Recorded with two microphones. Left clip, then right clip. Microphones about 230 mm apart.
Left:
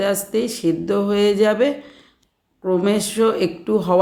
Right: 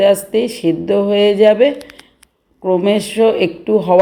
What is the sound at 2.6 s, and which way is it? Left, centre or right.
Speech, centre.